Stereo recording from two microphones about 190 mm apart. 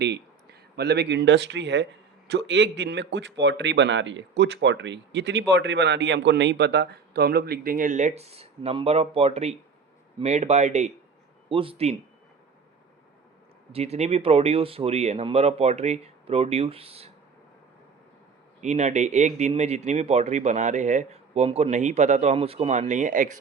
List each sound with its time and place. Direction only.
0.8 s a man's voice: 60° right (ahead or behind); by 11.9 s 30° right (ahead or behind)
13.7 s speech: 35° right (ahead or behind)
18.6 s speech: 40° right (ahead or behind)